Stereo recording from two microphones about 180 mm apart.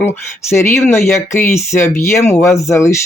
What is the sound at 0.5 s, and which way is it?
Speech, 15° left (ahead or behind).